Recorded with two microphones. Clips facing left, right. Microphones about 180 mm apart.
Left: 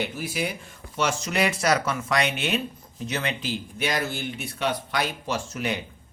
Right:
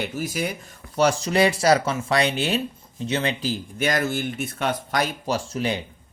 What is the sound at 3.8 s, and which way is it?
Speech, 50° right (ahead or behind).